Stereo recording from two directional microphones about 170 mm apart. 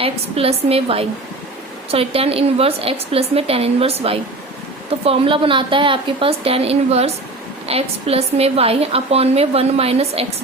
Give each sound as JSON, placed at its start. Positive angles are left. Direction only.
{"t": 0.0, "sound": "a woman's voice", "side_deg": -35}